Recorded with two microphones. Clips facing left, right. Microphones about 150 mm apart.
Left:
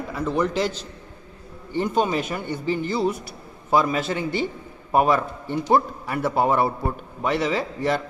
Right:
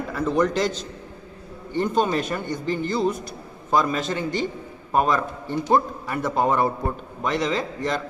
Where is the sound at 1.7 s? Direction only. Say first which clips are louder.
Even; 10° left (ahead or behind).